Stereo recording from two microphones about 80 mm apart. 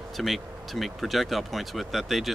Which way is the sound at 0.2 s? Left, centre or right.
Centre.